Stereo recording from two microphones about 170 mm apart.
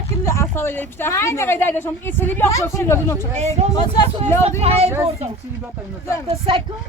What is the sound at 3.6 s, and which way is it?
Speech, 40° right (ahead or behind).